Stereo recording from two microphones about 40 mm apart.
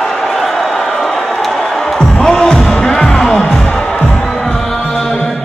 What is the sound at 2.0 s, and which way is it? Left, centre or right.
Music, centre.